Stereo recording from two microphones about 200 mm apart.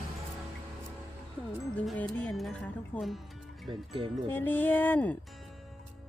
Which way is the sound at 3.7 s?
25° right (ahead or behind).